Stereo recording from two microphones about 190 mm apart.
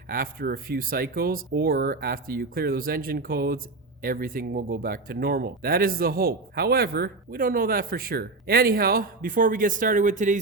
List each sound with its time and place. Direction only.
0.1 s speech: 50° right (ahead or behind)